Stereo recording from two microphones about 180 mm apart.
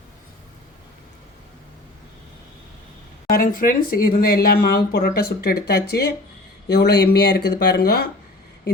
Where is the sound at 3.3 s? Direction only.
50° left (ahead or behind).